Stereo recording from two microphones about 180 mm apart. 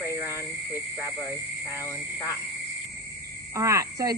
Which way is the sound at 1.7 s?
15° left (ahead or behind).